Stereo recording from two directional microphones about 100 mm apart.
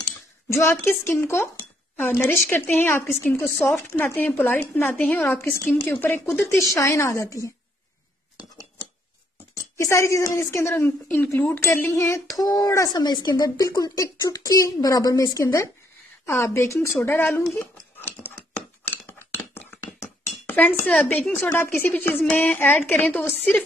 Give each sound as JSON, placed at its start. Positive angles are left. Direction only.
{"t": 0.5, "sound": "a woman's voice", "side_deg": 25}
{"t": 9.8, "sound": "a woman's voice", "side_deg": 30}
{"t": 17.6, "sound": "a sound", "side_deg": 20}
{"t": 18.9, "sound": "chink", "side_deg": 20}
{"t": 21.5, "sound": "speech", "side_deg": 25}